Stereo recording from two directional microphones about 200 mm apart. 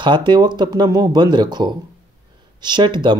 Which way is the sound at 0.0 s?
25° right (ahead or behind).